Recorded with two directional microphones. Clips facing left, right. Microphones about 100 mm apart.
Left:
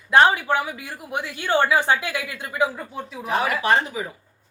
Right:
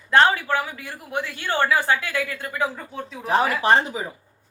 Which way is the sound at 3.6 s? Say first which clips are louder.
Right 2 dB; 30° right (ahead or behind).